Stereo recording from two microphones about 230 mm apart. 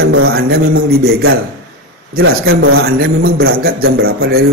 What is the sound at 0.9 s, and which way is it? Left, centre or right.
Speech, right.